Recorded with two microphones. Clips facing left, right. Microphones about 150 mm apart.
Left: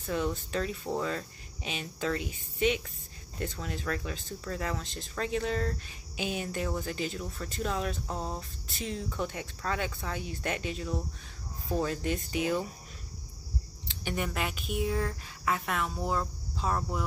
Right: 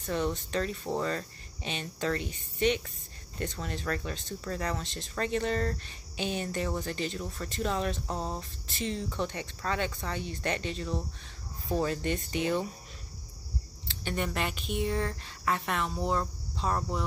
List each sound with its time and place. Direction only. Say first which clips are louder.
0.0 s speech: right 1 dB; 5° left (ahead or behind)
13.8 s speech: right 1 dB; 10° left (ahead or behind)